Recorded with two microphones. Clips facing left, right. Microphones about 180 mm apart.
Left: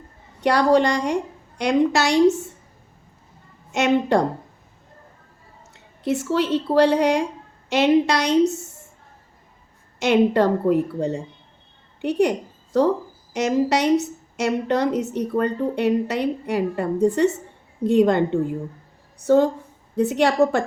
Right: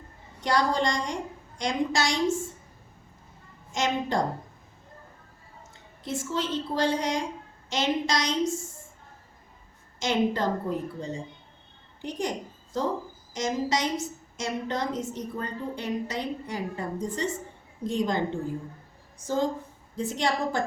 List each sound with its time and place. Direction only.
0.4 s a woman's voice: 65° left (ahead or behind)
3.7 s a woman's voice: 65° left (ahead or behind)
5.7 s a woman's voice: 65° left (ahead or behind)
10.0 s a woman's voice: 65° left (ahead or behind)